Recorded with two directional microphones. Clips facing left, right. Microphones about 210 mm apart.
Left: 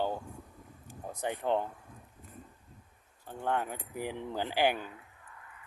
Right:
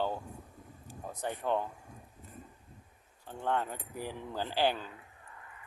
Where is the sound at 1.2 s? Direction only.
15° left (ahead or behind).